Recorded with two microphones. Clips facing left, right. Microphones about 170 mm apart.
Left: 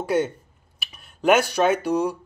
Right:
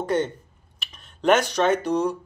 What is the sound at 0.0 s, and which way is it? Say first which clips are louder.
Speech: left 1 dB; 10° left (ahead or behind).